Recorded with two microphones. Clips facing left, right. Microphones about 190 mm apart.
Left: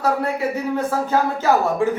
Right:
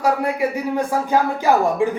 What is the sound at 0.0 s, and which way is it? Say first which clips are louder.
A man's voice: right 1 dB; 10° right (ahead or behind).